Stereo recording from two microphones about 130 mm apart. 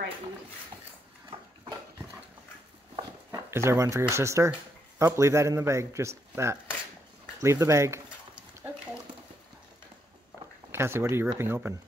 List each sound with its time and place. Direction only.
3.3 s speech: 20° right (ahead or behind)
10.7 s speech: 20° right (ahead or behind)